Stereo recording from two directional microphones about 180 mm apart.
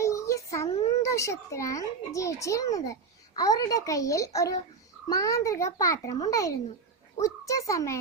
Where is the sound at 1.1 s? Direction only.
15° left (ahead or behind).